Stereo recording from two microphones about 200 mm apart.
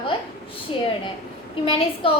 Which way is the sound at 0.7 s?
25° left (ahead or behind).